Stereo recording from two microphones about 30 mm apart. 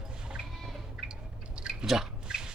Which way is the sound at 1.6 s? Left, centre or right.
Right.